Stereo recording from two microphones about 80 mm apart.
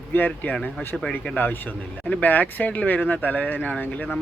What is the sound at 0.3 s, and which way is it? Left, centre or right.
Speech, centre.